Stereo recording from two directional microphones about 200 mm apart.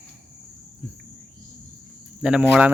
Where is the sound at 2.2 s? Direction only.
5° right (ahead or behind).